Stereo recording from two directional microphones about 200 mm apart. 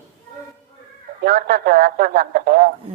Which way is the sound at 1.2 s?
50° right (ahead or behind).